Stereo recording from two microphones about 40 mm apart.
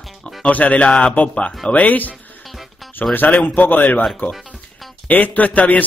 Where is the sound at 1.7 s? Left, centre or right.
Left.